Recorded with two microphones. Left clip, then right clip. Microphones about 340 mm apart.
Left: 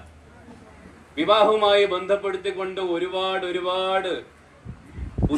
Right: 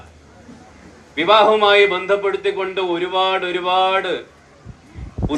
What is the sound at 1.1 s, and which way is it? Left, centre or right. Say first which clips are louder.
A man's voice: right 5 dB; centre.